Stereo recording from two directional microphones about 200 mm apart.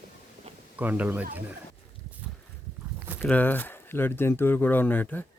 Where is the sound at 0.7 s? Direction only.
10° right (ahead or behind).